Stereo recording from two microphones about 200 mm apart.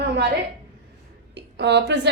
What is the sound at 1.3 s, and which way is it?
Speech, 60° right (ahead or behind).